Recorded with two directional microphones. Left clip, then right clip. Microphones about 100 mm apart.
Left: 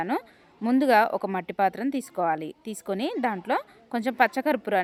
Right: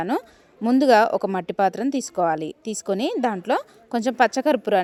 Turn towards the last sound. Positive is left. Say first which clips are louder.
# right 5 dB
turn(degrees=-30)  # may be behind; listen again after turning